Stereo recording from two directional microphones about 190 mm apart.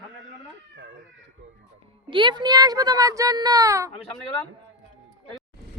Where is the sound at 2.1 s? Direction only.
25° right (ahead or behind).